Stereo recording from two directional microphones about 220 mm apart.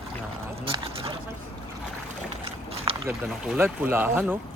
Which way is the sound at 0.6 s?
25° right (ahead or behind).